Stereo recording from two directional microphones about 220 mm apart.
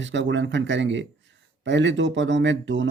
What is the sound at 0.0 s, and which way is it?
Speech, 55° right (ahead or behind).